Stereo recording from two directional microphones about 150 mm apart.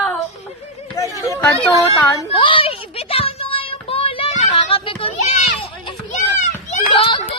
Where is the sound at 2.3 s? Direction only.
35° left (ahead or behind).